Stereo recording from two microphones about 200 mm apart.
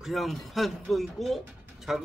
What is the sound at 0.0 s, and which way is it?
Speech, centre (ahead or behind).